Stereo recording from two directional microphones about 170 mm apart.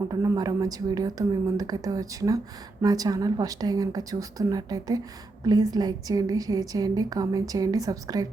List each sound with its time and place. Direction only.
0.1 s a woman's voice: 20° right (ahead or behind)